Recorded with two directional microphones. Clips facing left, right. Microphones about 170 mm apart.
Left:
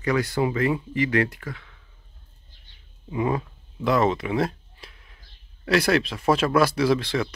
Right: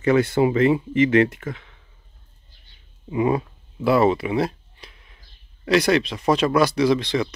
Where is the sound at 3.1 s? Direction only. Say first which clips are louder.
Right 4 dB; 10° right (ahead or behind).